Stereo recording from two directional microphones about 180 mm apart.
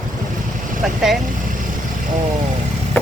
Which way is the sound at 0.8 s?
Centre (ahead or behind).